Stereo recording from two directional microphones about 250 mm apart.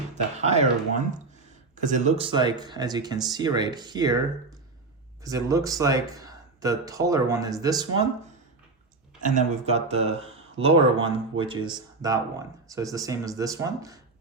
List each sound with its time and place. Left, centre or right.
0.3 s speech: right
9.2 s speech: right; by 14.0 s centre